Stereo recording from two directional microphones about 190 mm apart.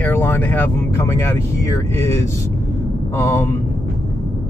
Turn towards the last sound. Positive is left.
turn(degrees=15)  # may be behind; listen again after turning